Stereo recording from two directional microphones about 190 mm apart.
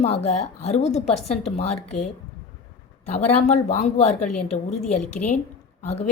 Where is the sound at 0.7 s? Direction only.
35° left (ahead or behind).